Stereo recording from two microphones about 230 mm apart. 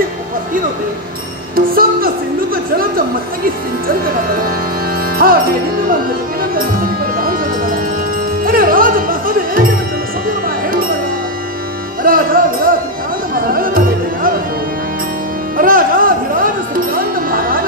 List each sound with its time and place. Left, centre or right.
1.5 s speech: right
3.8 s speech: right
5.1 s music: right
6.5 s music: right
12.0 s music: right
15.5 s music: right